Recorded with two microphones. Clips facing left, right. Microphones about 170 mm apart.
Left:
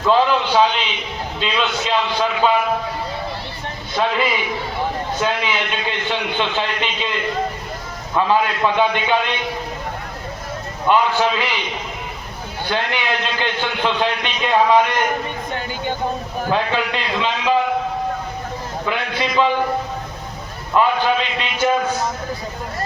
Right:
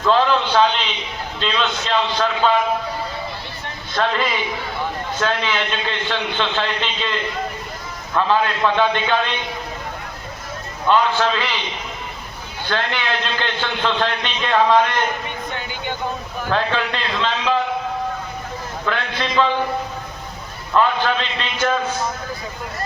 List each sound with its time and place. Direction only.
0.0 s a man's voice: 10° left (ahead or behind)
3.9 s a man's voice: 10° left (ahead or behind)
8.1 s a man's voice: 15° left (ahead or behind)
10.8 s a man's voice: 10° left (ahead or behind)
12.6 s a man's voice: 15° left (ahead or behind)
15.5 s speech: 40° left (ahead or behind)
16.5 s a man's voice: 10° left (ahead or behind)
18.9 s a man's voice: 10° left (ahead or behind)
20.7 s a man's voice: 10° left (ahead or behind)